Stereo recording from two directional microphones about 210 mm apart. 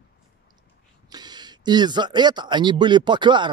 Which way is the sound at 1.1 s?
20° right (ahead or behind).